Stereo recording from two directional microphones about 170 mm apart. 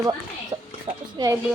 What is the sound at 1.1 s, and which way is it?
Speech, 20° right (ahead or behind).